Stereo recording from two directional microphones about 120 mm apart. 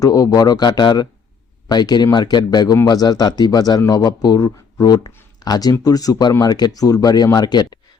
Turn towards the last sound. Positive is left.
turn(degrees=35)  # may be behind; listen again after turning